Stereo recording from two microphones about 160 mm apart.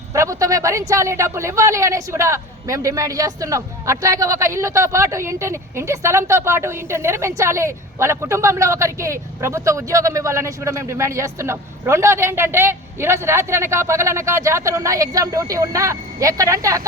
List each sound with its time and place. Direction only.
0.1 s a woman's voice: 20° right (ahead or behind)